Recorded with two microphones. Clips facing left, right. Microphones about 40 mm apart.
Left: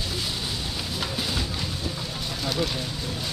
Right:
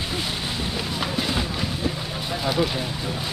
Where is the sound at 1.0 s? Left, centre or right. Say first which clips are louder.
Right 4 dB; centre.